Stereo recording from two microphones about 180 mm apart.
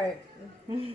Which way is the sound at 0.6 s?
30° right (ahead or behind).